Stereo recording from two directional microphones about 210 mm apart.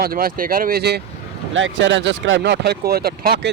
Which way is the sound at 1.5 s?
65° right (ahead or behind).